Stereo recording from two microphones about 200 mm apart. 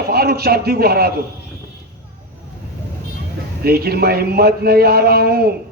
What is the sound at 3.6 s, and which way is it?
A man's voice, 50° right (ahead or behind).